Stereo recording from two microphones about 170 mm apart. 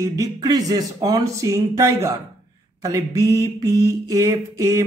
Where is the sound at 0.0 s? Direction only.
20° right (ahead or behind).